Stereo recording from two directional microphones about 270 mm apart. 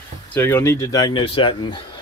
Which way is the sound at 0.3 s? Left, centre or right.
Centre.